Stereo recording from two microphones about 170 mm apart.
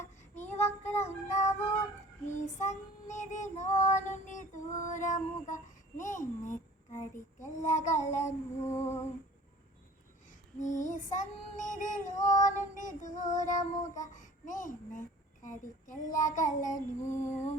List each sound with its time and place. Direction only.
0.0 s child singing: 45° left (ahead or behind)
8.6 s a sound: 15° left (ahead or behind)
10.6 s child singing: 45° left (ahead or behind)